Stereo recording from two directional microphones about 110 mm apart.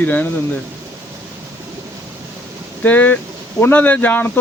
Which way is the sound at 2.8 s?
15° left (ahead or behind).